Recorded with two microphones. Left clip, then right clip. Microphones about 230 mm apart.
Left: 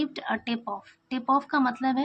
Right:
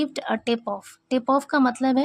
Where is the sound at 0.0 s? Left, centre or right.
Right.